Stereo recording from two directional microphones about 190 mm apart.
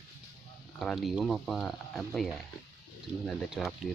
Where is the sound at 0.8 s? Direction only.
Centre (ahead or behind).